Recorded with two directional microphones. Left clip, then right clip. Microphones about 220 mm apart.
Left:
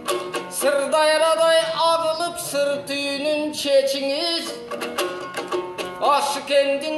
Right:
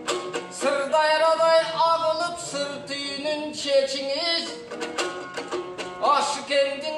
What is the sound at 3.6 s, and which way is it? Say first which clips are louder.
Music: left 3 dB; 45° left (ahead or behind).